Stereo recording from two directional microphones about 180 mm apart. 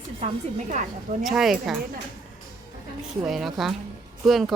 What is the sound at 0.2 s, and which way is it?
Speech, 35° right (ahead or behind).